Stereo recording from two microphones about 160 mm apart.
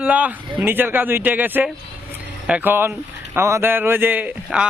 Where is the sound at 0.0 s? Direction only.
10° right (ahead or behind).